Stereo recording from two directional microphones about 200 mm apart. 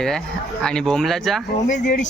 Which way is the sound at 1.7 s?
40° left (ahead or behind).